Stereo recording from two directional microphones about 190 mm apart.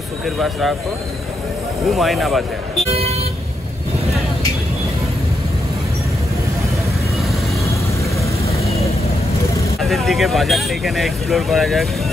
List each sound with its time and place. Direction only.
0.4 s speech: centre (ahead or behind)
1.9 s speech: centre (ahead or behind)
2.8 s speech: 35° right (ahead or behind)
9.8 s speech: centre (ahead or behind)